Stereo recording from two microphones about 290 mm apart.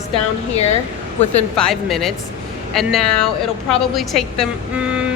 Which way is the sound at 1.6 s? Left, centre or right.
Centre.